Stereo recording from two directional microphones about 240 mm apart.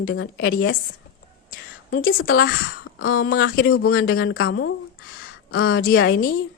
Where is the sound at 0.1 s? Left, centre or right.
Left.